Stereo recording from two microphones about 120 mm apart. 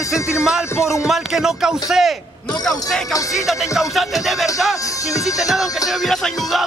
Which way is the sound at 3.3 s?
Centre (ahead or behind).